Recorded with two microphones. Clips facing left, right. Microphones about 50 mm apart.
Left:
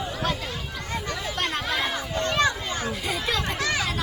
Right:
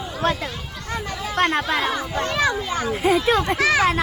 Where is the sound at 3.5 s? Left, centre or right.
Right.